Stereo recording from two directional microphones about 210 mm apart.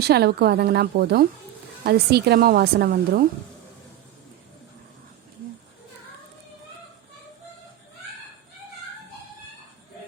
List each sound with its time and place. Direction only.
0.0 s speech: 50° right (ahead or behind)